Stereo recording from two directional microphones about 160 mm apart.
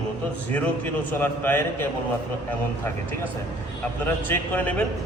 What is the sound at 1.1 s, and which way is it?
Speech, 10° left (ahead or behind).